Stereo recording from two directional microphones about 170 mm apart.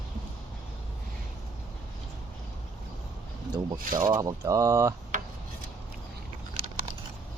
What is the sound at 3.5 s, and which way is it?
Speech, 20° right (ahead or behind).